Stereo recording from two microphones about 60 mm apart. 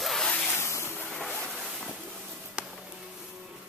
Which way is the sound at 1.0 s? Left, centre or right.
Centre.